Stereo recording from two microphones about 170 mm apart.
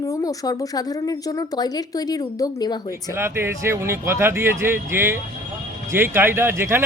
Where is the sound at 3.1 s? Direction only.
15° right (ahead or behind).